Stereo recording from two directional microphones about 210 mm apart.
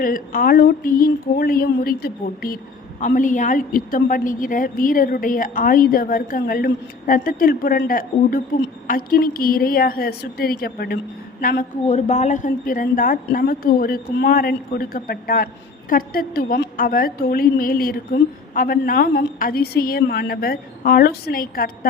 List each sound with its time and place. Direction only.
0.0 s a woman's voice: 40° left (ahead or behind)